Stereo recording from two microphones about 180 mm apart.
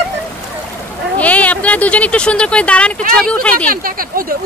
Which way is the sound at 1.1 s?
10° left (ahead or behind).